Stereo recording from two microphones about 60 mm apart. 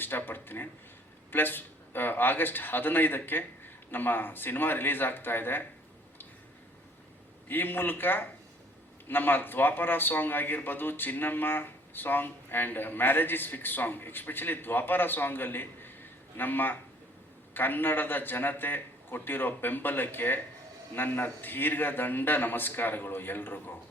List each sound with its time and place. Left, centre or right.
0.0 s a man's voice: left
7.4 s a man's voice: left